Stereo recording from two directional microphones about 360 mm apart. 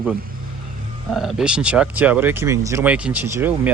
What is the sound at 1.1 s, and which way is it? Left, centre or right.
Speech, centre.